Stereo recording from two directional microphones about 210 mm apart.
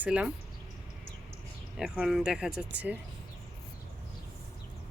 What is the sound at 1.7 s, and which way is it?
Speech, 5° right (ahead or behind).